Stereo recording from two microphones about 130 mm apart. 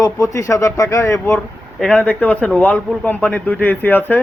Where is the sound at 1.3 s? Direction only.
5° left (ahead or behind).